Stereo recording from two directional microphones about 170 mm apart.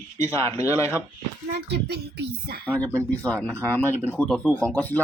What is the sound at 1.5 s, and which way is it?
Speech, 80° right.